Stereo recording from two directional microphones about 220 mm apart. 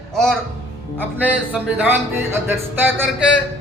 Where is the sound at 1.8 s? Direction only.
10° right (ahead or behind).